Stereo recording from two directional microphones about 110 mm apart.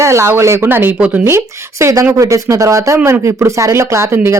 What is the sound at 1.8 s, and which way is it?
Speech, 30° right (ahead or behind).